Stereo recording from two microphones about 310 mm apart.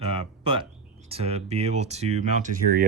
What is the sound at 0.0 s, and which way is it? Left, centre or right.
Speech, centre.